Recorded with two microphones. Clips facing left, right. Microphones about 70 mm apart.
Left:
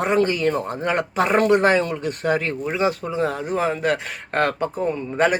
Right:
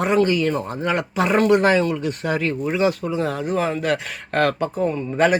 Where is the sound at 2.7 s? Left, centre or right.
Left.